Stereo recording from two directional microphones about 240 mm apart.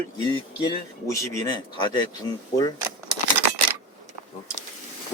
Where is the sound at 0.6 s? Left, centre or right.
Centre.